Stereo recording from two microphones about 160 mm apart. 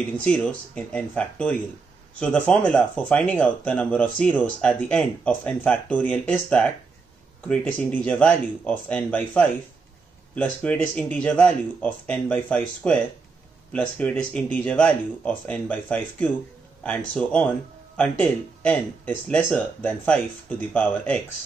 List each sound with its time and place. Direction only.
0.2 s speech: 5° left (ahead or behind)